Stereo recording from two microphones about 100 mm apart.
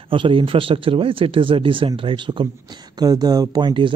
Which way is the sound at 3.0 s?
40° right (ahead or behind).